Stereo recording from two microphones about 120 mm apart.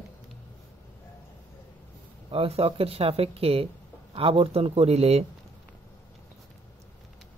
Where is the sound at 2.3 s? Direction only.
50° right (ahead or behind).